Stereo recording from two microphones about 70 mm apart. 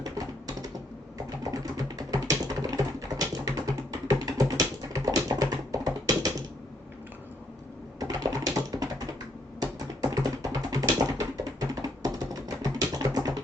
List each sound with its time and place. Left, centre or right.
0.0 s typing: right
4.1 s music: right
7.9 s typing: right
9.6 s music: right